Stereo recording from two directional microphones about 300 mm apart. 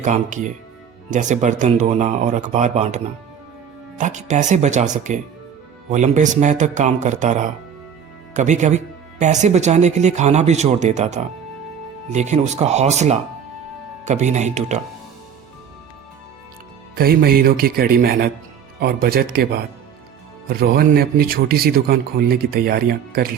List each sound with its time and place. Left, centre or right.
0.0 s speech: right
16.9 s speech: right